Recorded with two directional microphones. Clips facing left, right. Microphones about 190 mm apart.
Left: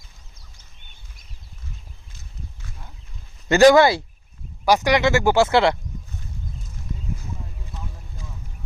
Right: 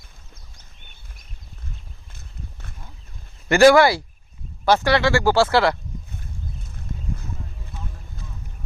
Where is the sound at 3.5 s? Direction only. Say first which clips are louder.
Even; 20° left (ahead or behind).